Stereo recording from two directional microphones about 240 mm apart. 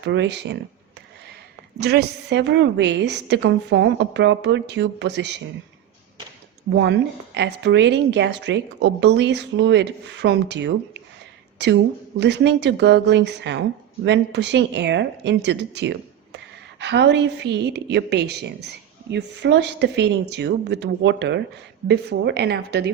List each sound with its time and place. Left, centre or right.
0.0 s a woman's voice: right
1.8 s a woman's voice: right
6.7 s a woman's voice: right